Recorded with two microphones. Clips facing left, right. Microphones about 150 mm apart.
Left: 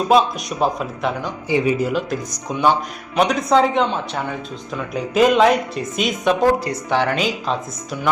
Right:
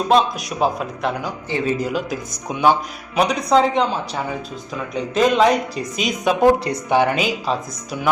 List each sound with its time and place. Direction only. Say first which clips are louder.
0.1 s speech: left 1 dB; centre (ahead or behind)
1.5 s speech: left 4 dB; 15° left (ahead or behind)
1.9 s speech: left 2 dB; centre (ahead or behind)
3.2 s speech: left 1 dB; centre (ahead or behind)
6.4 s speech: right 2 dB; 15° right (ahead or behind)